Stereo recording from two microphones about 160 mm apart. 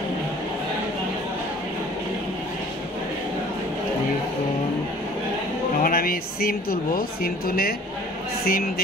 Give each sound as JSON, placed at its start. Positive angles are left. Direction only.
{"t": 5.8, "sound": "a man's voice", "side_deg": 65}